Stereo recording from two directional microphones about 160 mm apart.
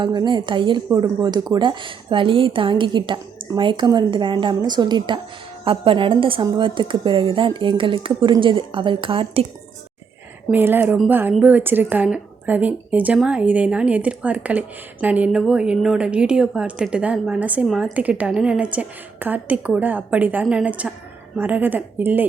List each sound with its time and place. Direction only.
0.0 s a woman's voice: 30° right (ahead or behind)
10.5 s speech: 10° right (ahead or behind)